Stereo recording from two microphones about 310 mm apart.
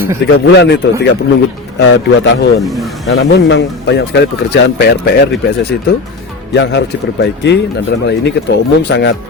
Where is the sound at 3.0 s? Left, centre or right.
Left.